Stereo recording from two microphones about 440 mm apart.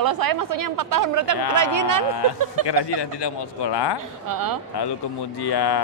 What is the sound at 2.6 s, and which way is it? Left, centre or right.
Speech, left.